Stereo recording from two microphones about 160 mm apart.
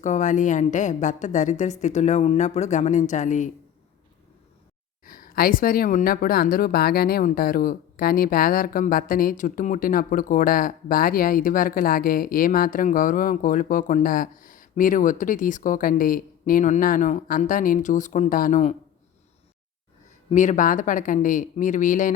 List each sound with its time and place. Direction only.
0.0 s a woman's voice: 50° left (ahead or behind)
5.0 s speech: 65° left (ahead or behind)
20.3 s a woman's voice: 50° left (ahead or behind)